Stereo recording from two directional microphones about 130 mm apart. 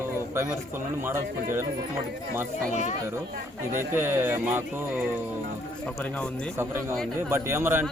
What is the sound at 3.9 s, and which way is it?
Speech, 15° right (ahead or behind).